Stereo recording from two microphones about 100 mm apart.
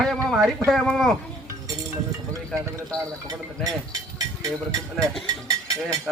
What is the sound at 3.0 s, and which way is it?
Speech, 35° right (ahead or behind).